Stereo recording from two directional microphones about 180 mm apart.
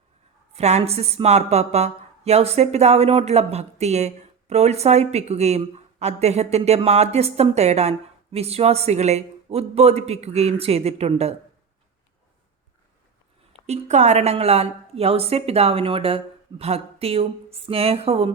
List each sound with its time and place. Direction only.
0.5 s a woman's voice: 35° right (ahead or behind)
13.7 s a woman's voice: 40° right (ahead or behind)